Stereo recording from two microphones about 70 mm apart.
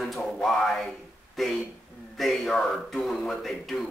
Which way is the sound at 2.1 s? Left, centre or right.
Centre.